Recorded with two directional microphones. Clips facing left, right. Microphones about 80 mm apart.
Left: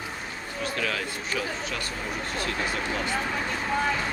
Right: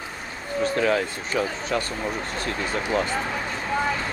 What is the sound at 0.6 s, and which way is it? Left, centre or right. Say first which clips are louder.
Speech: right 8 dB; right.